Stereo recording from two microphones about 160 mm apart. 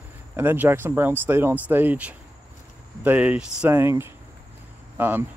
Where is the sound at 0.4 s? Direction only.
15° right (ahead or behind).